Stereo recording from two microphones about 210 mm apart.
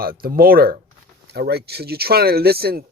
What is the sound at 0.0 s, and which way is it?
Speech, 45° right (ahead or behind).